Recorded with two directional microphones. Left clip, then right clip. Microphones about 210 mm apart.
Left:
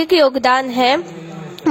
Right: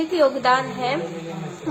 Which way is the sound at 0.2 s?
55° left (ahead or behind).